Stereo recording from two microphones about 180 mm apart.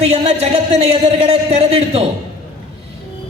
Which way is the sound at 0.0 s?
35° right (ahead or behind).